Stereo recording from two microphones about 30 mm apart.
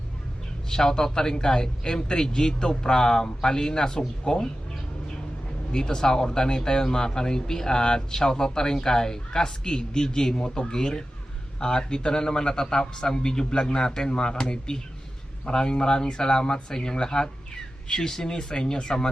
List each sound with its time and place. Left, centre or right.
0.7 s speech: centre
5.7 s speech: left